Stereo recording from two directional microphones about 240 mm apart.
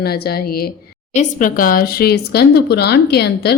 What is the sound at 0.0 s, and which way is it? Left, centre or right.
Speech, left.